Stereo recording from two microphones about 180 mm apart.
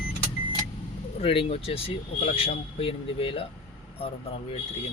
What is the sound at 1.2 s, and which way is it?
Speech, 30° left (ahead or behind).